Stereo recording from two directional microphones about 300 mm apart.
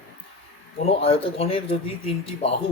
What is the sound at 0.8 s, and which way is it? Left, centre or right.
Speech, centre.